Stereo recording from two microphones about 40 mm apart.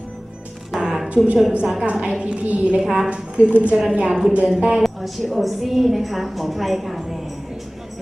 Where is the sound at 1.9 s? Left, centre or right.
Centre.